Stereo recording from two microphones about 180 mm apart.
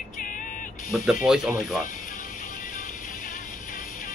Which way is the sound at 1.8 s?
50° left (ahead or behind).